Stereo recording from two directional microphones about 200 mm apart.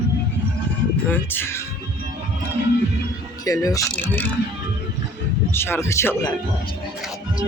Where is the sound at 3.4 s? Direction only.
15° left (ahead or behind).